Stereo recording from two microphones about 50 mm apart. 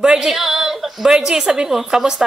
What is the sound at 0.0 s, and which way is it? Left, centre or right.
A woman's voice, centre.